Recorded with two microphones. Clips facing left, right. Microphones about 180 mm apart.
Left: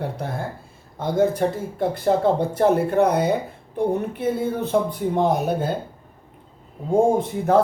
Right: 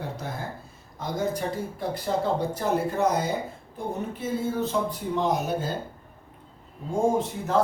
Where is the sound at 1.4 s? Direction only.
55° left (ahead or behind).